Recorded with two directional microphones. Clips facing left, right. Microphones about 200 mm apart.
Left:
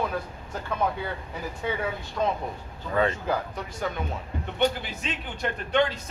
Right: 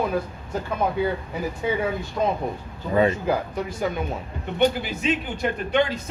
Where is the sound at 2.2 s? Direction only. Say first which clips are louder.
Right 2 dB; 15° right (ahead or behind).